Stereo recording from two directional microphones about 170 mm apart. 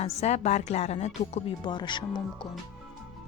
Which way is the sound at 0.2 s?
40° left (ahead or behind).